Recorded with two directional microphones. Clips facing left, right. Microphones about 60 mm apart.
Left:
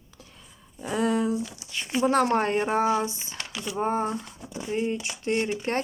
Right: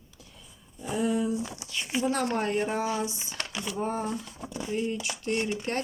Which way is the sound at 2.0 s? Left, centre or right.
Left.